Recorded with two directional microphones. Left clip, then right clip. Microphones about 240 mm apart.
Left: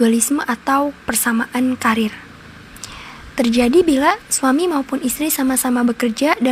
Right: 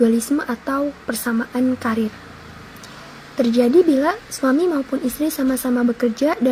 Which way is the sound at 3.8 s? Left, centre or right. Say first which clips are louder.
Left 3 dB; left.